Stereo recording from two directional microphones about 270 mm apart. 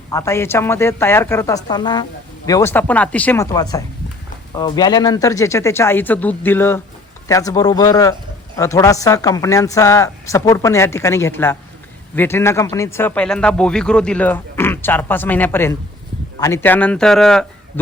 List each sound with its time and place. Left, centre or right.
0.1 s speech: centre